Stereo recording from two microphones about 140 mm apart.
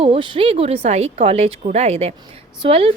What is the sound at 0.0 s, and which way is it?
A woman's voice, 40° right (ahead or behind).